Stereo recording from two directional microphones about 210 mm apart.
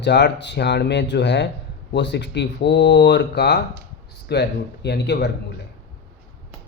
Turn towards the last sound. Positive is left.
turn(degrees=55)  # may be behind; listen again after turning